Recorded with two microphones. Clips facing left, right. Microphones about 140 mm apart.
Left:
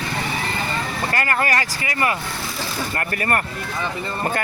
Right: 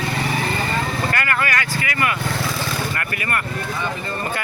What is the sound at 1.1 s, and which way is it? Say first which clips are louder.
Speech: left 5 dB; 35° left (ahead or behind).